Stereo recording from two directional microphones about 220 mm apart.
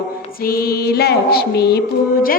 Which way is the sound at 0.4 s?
45° left (ahead or behind).